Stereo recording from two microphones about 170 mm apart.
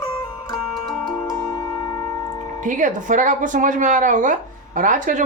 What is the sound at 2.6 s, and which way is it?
Speech, 50° right (ahead or behind).